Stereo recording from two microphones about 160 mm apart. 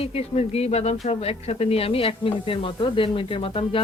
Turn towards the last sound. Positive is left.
turn(degrees=35)  # may be behind; listen again after turning